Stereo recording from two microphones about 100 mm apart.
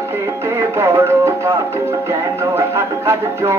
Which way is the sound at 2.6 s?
30° right (ahead or behind).